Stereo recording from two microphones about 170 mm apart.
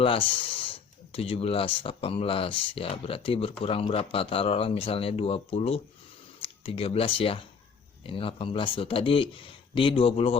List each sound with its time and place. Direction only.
0.0 s speech: 30° left (ahead or behind)